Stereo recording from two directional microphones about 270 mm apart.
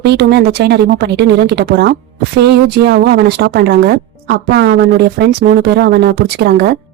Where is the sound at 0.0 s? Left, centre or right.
Right.